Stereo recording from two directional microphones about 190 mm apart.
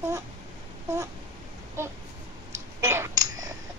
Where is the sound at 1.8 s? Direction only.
15° right (ahead or behind).